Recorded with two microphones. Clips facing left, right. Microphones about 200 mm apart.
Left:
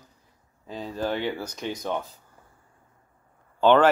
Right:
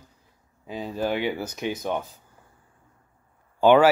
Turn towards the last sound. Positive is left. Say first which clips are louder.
# right 2 dB
turn(degrees=-10)  # may be behind; listen again after turning